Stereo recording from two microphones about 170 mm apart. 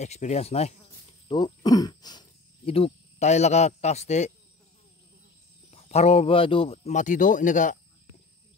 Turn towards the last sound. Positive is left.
turn(degrees=50)  # may be behind; listen again after turning